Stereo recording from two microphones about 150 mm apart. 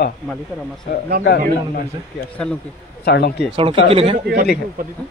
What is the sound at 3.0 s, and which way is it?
Speech, 90° left.